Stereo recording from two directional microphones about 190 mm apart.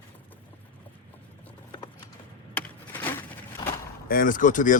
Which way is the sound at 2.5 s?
10° left (ahead or behind).